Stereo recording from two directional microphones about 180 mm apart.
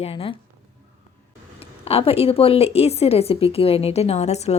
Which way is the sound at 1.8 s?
35° left (ahead or behind).